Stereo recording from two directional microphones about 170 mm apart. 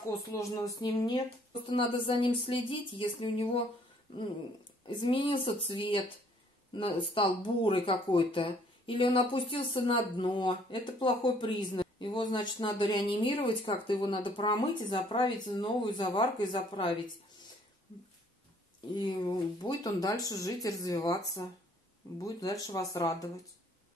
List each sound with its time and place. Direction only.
0.3 s speech: 20° left (ahead or behind)
18.9 s speech: 25° left (ahead or behind)